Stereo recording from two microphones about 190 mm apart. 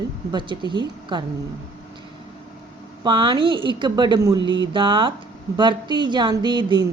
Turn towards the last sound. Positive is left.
turn(degrees=-25)  # may be behind; listen again after turning